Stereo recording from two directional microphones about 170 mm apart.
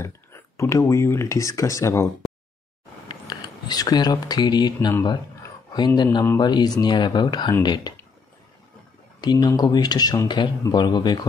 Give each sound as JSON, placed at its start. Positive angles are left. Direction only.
{"t": 0.0, "sound": "speech", "side_deg": 15}
{"t": 3.1, "sound": "speech", "side_deg": 25}
{"t": 5.0, "sound": "a sound", "side_deg": 25}
{"t": 6.2, "sound": "speech", "side_deg": 25}
{"t": 9.2, "sound": "speech", "side_deg": 25}